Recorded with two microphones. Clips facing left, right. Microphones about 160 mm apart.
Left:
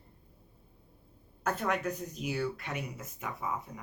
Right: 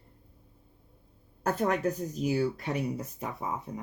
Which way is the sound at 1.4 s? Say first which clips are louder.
Right 4 dB; 40° right (ahead or behind).